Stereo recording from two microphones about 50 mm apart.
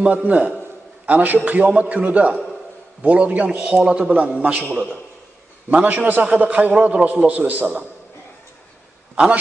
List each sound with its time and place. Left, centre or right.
0.0 s a man's voice: right
5.8 s a man's voice: centre
6.3 s a man's voice: right
9.1 s speech: right